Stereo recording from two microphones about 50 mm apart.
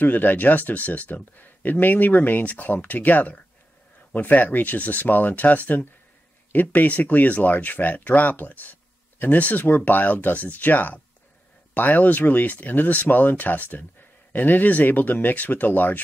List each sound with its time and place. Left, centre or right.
0.0 s speech: left